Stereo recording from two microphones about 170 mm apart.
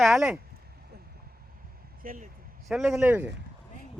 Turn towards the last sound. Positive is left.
turn(degrees=-10)  # may be behind; listen again after turning